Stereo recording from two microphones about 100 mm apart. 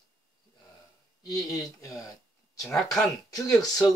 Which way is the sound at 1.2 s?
40° left (ahead or behind).